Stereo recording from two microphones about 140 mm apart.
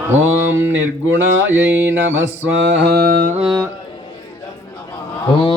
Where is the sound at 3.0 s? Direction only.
90° right.